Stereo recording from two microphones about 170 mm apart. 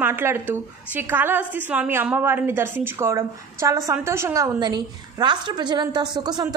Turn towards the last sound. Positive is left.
turn(degrees=-25)  # may be behind; listen again after turning